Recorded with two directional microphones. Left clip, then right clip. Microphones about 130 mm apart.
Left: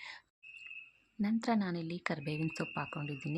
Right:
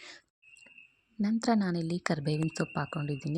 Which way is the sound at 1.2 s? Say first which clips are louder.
Right 5 dB; 50° right (ahead or behind).